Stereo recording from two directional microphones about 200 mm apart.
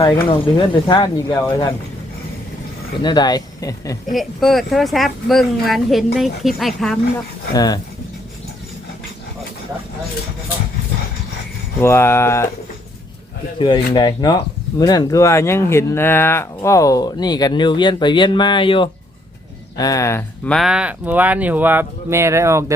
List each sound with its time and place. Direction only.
0.0 s speech: 25° left (ahead or behind)
3.0 s speech: 20° left (ahead or behind)
4.1 s speech: centre (ahead or behind)
7.5 s speech: 20° left (ahead or behind)
11.8 s speech: 10° left (ahead or behind)
13.6 s speech: 20° left (ahead or behind); by 22.6 s 15° right (ahead or behind)